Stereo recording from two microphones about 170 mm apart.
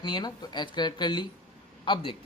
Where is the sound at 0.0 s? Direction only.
25° left (ahead or behind).